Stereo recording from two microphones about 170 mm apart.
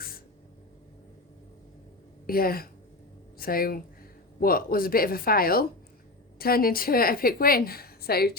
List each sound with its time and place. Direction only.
2.2 s a woman's voice: 60° left (ahead or behind)